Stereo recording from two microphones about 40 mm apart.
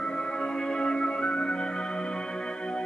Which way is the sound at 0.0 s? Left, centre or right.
Left.